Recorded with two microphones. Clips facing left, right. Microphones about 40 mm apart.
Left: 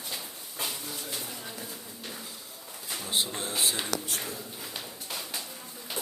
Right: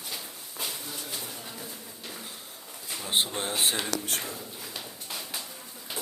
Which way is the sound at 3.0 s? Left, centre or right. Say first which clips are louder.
Right 3 dB; right.